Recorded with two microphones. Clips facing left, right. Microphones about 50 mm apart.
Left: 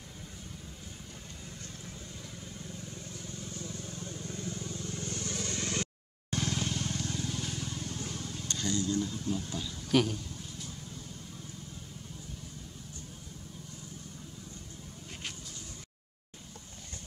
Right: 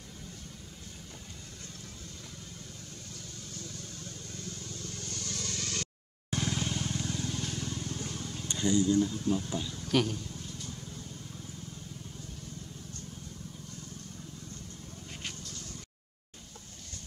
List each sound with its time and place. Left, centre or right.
3.1 s vehicle: centre
6.3 s vehicle: centre
8.5 s vehicle: centre
8.9 s speech: centre
15.2 s a sound: centre